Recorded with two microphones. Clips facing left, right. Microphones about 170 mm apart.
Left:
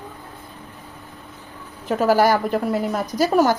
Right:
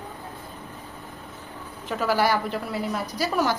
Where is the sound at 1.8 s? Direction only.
45° left (ahead or behind).